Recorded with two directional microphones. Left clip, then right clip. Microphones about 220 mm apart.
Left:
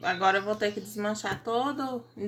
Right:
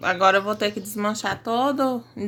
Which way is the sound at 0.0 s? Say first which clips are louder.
Right 7 dB; 45° right (ahead or behind).